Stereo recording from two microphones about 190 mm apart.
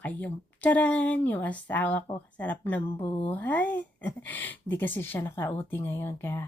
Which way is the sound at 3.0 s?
25° left (ahead or behind).